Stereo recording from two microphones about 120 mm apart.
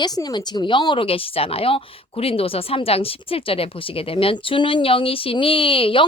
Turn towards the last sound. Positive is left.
turn(degrees=45)  # may be behind; listen again after turning